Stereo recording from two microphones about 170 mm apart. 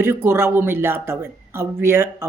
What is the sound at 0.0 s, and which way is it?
Speech, 15° right (ahead or behind).